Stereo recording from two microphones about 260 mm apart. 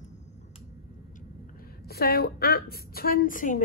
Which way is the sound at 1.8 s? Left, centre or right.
Left.